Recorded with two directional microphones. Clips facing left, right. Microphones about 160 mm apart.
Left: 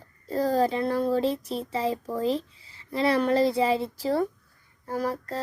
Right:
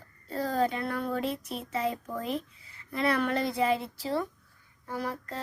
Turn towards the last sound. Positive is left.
turn(degrees=40)  # may be behind; listen again after turning